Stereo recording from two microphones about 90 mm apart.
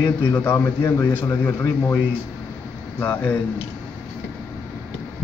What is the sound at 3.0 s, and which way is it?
Speech, 20° left (ahead or behind).